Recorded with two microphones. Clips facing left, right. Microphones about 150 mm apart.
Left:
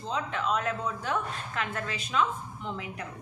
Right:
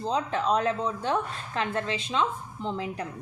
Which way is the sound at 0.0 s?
35° right (ahead or behind).